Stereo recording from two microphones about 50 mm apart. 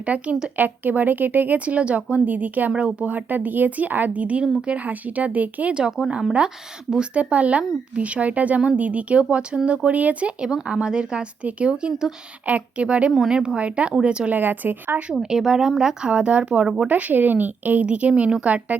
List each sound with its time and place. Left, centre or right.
0.0 s a woman's voice: right
6.0 s speech: centre
10.4 s speech: centre
12.5 s speech: right
13.1 s speech: centre
14.3 s a woman's voice: right
15.2 s speech: centre
16.9 s a woman's voice: right
17.8 s speech: right